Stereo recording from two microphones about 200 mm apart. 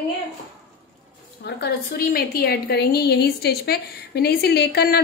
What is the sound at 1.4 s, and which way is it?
A woman's voice, 55° left (ahead or behind).